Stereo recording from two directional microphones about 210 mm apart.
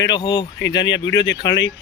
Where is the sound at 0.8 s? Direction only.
60° left (ahead or behind).